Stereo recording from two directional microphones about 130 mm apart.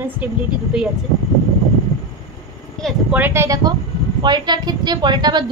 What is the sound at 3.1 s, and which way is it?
Speech, 15° right (ahead or behind).